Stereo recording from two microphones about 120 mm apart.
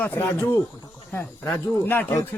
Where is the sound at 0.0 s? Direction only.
15° left (ahead or behind).